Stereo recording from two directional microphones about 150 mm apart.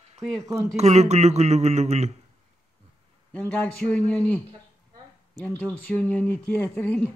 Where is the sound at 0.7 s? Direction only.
45° right (ahead or behind).